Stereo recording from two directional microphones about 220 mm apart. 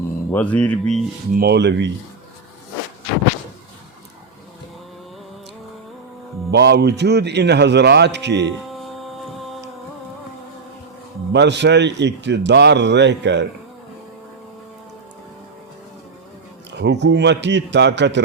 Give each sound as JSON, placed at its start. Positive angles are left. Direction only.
{"t": 0.3, "sound": "speech", "side_deg": 10}
{"t": 1.4, "sound": "a man's voice", "side_deg": -50}
{"t": 6.5, "sound": "a man's voice", "side_deg": -50}
{"t": 8.7, "sound": "music", "side_deg": 0}
{"t": 11.3, "sound": "a man's voice", "side_deg": -50}
{"t": 16.8, "sound": "a man's voice", "side_deg": -50}